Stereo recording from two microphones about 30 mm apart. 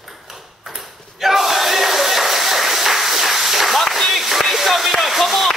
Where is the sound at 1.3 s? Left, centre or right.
Centre.